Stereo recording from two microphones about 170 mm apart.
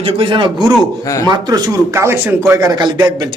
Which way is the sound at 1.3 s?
20° right (ahead or behind).